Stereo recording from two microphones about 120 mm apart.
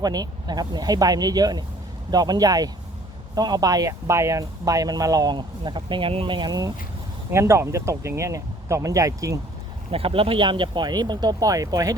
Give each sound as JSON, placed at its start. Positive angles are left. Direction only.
{"t": 0.0, "sound": "speech", "side_deg": -35}
{"t": 7.3, "sound": "speech", "side_deg": -20}
{"t": 9.9, "sound": "speech", "side_deg": -50}